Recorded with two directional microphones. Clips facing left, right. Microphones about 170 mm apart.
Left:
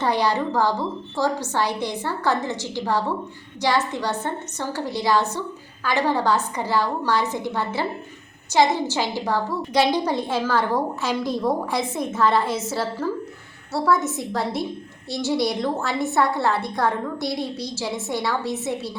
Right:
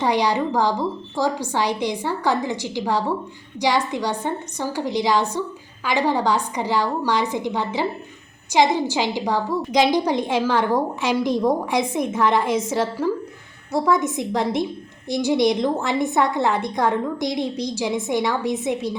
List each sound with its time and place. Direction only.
0.0 s a woman's voice: 15° right (ahead or behind)